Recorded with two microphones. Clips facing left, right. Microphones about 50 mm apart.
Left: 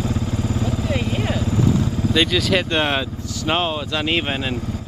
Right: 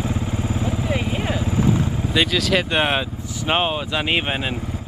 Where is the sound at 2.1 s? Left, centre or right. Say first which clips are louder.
Left 1 dB; centre.